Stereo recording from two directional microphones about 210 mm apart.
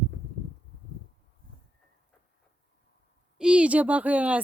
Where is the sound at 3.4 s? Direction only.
5° right (ahead or behind).